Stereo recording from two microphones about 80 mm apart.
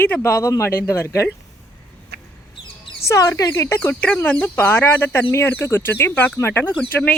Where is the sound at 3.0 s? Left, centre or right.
Left.